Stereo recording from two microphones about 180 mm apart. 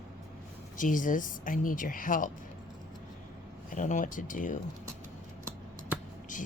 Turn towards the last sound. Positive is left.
turn(degrees=45)  # may be behind; listen again after turning